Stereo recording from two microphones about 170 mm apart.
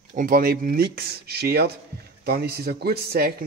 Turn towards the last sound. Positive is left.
turn(degrees=-65)  # may be behind; listen again after turning